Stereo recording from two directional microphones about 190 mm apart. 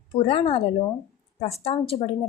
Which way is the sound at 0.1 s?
30° left (ahead or behind).